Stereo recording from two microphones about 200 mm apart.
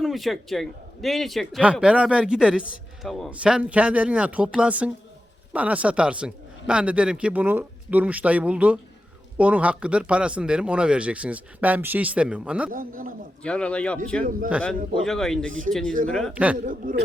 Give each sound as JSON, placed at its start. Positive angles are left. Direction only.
{"t": 0.0, "sound": "a man's voice", "side_deg": 0}
{"t": 12.7, "sound": "a man's voice", "side_deg": -45}
{"t": 13.4, "sound": "a man's voice", "side_deg": 5}
{"t": 16.6, "sound": "a man's voice", "side_deg": -40}